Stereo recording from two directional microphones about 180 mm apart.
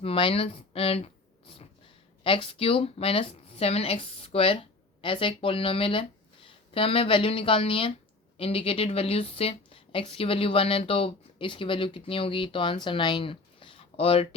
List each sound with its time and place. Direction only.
0.0 s speech: 30° left (ahead or behind)